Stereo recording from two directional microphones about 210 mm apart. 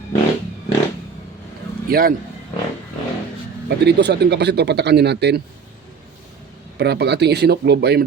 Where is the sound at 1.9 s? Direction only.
45° right (ahead or behind).